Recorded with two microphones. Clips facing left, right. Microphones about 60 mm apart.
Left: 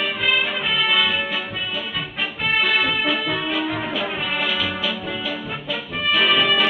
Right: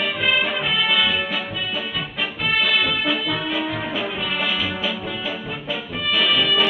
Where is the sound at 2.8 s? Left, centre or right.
Left.